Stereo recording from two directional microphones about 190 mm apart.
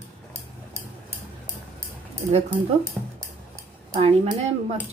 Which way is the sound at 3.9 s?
30° right (ahead or behind).